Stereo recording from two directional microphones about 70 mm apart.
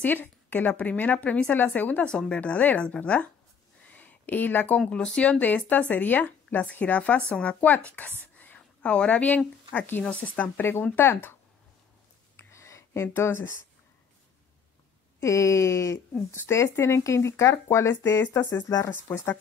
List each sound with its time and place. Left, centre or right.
0.0 s a woman's voice: left
2.0 s a woman's voice: centre
10.6 s speech: left
12.4 s a sound: left
15.1 s speech: left
18.5 s speech: left
19.1 s speech: left